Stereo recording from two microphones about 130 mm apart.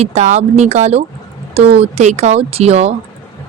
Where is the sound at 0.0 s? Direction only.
60° right (ahead or behind).